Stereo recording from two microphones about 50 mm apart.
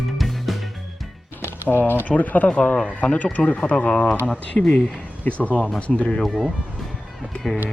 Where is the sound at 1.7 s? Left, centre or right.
Left.